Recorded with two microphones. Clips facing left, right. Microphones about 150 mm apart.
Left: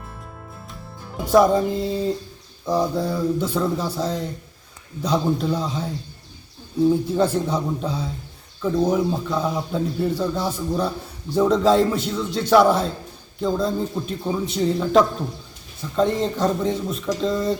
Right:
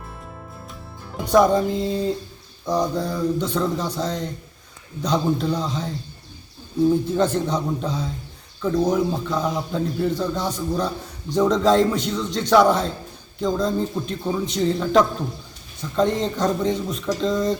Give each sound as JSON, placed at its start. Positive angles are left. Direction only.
{"t": 1.2, "sound": "a man's voice", "side_deg": 5}
{"t": 6.9, "sound": "a man's voice", "side_deg": 10}